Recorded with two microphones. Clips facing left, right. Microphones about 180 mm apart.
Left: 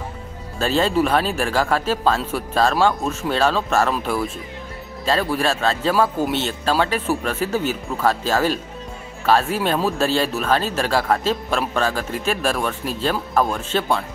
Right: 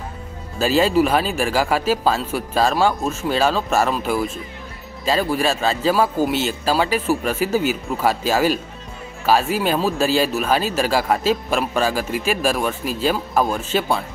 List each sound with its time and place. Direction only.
0.6 s speech: 5° right (ahead or behind)